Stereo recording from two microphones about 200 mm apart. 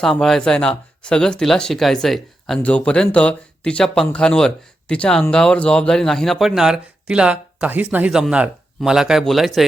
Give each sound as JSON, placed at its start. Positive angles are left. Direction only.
{"t": 0.0, "sound": "speech", "side_deg": 0}